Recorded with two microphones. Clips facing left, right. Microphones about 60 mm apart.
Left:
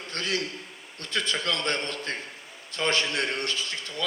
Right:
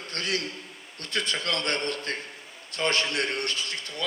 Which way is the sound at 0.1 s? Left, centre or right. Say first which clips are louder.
Left 1 dB; right.